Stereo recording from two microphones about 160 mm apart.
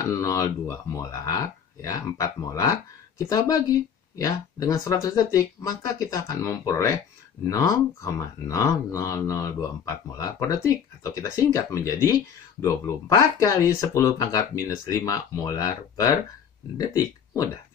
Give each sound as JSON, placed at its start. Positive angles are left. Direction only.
{"t": 0.2, "sound": "speech", "side_deg": 20}